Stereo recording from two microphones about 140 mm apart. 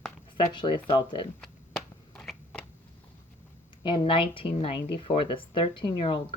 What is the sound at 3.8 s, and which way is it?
Speech, 35° left (ahead or behind).